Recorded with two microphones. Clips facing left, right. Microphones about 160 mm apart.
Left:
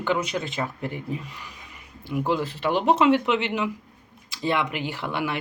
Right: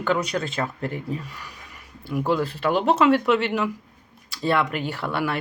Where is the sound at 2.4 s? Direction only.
20° left (ahead or behind).